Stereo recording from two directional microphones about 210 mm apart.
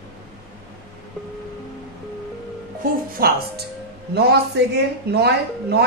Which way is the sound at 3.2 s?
45° right (ahead or behind).